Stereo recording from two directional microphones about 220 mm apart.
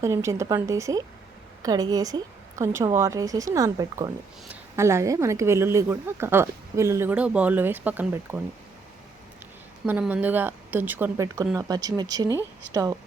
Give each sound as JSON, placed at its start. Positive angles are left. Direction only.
{"t": 0.0, "sound": "speech", "side_deg": -15}
{"t": 9.8, "sound": "speech", "side_deg": -5}